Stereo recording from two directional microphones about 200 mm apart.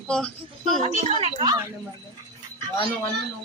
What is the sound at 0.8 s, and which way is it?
Speech, 30° right (ahead or behind).